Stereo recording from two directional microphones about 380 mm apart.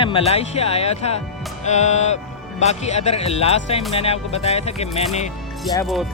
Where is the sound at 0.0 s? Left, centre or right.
Centre.